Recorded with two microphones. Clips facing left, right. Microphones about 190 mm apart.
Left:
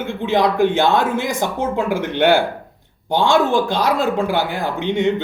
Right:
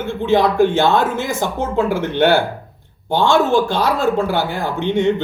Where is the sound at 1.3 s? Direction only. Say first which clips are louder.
Right 1 dB; 15° left (ahead or behind).